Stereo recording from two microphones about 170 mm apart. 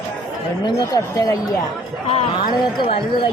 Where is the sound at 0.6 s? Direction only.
20° left (ahead or behind).